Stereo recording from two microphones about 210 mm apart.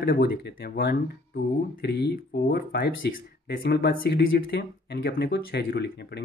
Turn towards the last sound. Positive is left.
turn(degrees=50)  # may be behind; listen again after turning